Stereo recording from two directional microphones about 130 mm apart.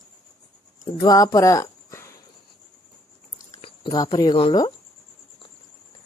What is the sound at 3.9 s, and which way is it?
Speech, 30° left (ahead or behind).